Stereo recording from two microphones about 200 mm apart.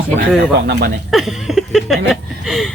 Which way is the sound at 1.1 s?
Centre (ahead or behind).